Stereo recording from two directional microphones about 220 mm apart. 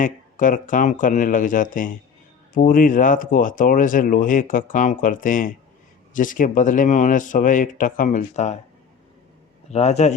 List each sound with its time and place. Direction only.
0.0 s speech: 35° left (ahead or behind)
9.7 s speech: 30° left (ahead or behind)